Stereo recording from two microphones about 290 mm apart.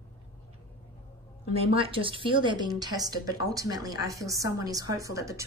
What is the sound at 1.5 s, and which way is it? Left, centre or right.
A woman's voice, centre.